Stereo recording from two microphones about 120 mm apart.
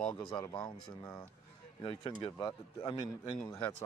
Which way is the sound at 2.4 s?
35° left (ahead or behind).